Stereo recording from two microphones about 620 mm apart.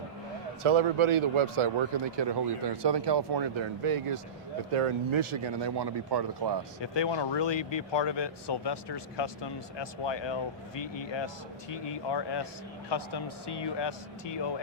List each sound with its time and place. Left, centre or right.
0.6 s a man's voice: right
2.1 s speech: right
6.8 s speech: left